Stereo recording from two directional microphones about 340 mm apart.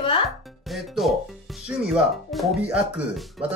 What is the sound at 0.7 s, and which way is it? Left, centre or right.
Music, centre.